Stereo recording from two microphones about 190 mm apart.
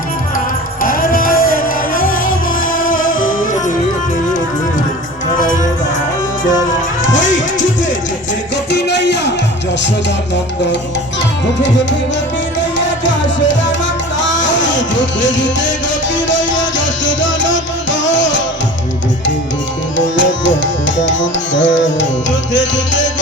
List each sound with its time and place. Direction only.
0.8 s music: 50° left (ahead or behind)
8.7 s music: 65° left (ahead or behind)
12.8 s music: 75° left (ahead or behind)
20.1 s music: 75° left (ahead or behind)